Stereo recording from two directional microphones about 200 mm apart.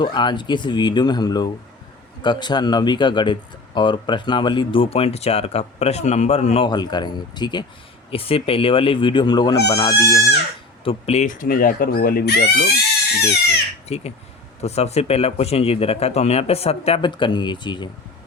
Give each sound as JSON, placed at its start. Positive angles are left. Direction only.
{"t": 0.0, "sound": "speech", "side_deg": 20}
{"t": 10.8, "sound": "speech", "side_deg": 30}
{"t": 13.8, "sound": "speech", "side_deg": 30}